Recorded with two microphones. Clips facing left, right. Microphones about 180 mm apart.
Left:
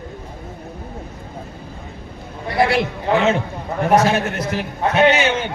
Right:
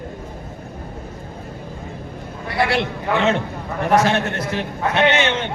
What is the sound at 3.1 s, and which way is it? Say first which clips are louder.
Speech: left 3 dB; 25° left (ahead or behind).